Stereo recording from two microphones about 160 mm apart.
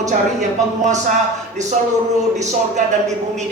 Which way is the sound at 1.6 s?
45° right (ahead or behind).